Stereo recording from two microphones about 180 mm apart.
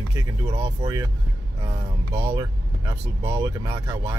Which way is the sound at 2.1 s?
15° right (ahead or behind).